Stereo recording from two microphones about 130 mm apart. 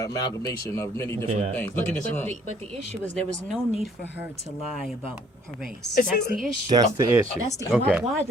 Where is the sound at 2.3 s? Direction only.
50° right (ahead or behind).